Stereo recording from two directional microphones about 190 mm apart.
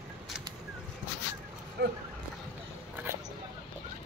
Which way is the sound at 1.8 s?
55° right (ahead or behind).